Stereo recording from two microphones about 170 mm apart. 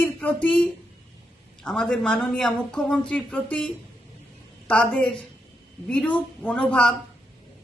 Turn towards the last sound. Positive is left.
turn(degrees=5)  # may be behind; listen again after turning